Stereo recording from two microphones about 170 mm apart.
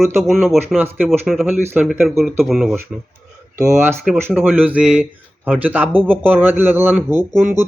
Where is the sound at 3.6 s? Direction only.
20° right (ahead or behind).